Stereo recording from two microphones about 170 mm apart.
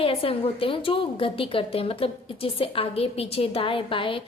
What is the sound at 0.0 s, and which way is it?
A woman's voice, 35° left (ahead or behind).